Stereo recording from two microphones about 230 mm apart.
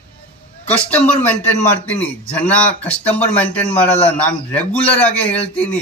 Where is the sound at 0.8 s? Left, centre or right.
Centre.